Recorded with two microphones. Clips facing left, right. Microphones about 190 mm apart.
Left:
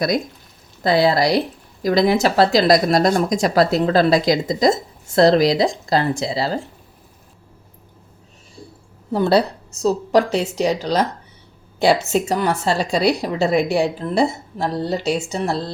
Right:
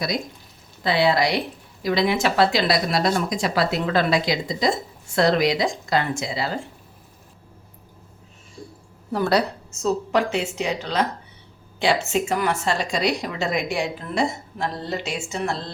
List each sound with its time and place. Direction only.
0.8 s a woman's voice: 40° left (ahead or behind)
9.1 s a woman's voice: 25° left (ahead or behind)